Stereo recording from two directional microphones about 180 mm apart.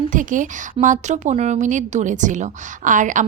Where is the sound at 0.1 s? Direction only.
45° right (ahead or behind).